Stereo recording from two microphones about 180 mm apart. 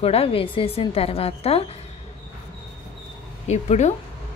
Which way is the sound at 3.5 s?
40° left (ahead or behind).